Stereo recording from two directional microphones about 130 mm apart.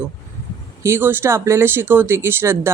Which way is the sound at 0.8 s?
20° right (ahead or behind).